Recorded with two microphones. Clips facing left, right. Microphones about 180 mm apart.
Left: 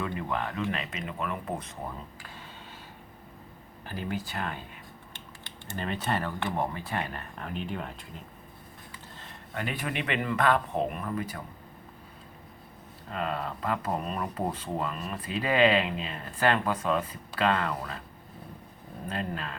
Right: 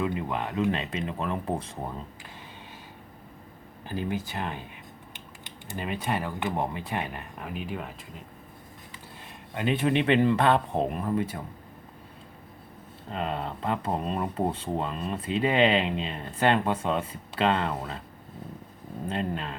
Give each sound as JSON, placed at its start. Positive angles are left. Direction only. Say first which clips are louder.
{"t": 0.0, "sound": "speech", "louder": "right 3 dB", "side_deg": -20}
{"t": 0.8, "sound": "speech", "louder": "right 3 dB", "side_deg": -30}
{"t": 3.8, "sound": "speech", "louder": "right 3 dB", "side_deg": -20}
{"t": 9.2, "sound": "speech", "louder": "right 6 dB", "side_deg": -20}
{"t": 13.1, "sound": "speech", "louder": "right 1 dB", "side_deg": -25}
{"t": 19.0, "sound": "speech", "louder": "right 3 dB", "side_deg": -25}